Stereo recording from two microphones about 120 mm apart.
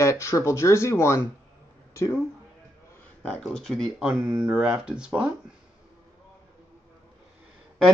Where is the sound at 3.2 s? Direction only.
10° left (ahead or behind).